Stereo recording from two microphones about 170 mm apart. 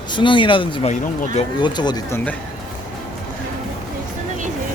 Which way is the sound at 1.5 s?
25° left (ahead or behind).